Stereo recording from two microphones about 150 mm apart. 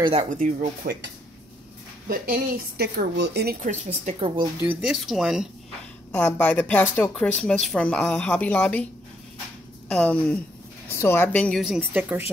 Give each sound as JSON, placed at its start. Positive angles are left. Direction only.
{"t": 0.0, "sound": "speech", "side_deg": -40}
{"t": 0.3, "sound": "speech", "side_deg": -65}
{"t": 2.0, "sound": "speech", "side_deg": -75}
{"t": 3.7, "sound": "a woman's voice", "side_deg": -50}
{"t": 4.8, "sound": "speech", "side_deg": 0}
{"t": 6.1, "sound": "speech", "side_deg": 10}
{"t": 9.8, "sound": "a woman's voice", "side_deg": 10}
{"t": 11.6, "sound": "speech", "side_deg": 0}